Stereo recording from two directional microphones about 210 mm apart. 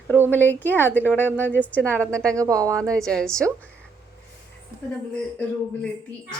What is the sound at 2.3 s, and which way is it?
Speech, 15° right (ahead or behind).